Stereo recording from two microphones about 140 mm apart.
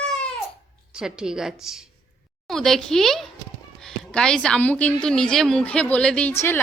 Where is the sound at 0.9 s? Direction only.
5° right (ahead or behind).